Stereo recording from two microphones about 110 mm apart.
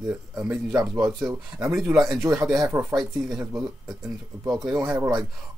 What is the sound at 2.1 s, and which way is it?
Speech, 25° right (ahead or behind).